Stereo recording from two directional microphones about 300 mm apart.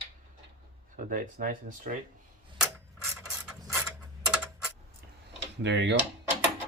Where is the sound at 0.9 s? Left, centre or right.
Right.